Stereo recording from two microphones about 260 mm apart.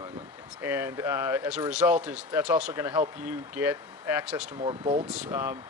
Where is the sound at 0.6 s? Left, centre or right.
Centre.